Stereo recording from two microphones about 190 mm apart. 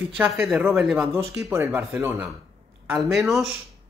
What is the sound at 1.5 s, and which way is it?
Speech, 15° right (ahead or behind).